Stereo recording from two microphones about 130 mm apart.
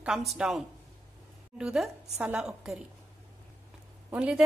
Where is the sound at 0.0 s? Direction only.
Centre (ahead or behind).